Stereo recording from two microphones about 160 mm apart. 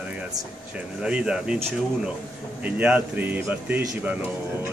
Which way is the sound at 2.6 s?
10° right (ahead or behind).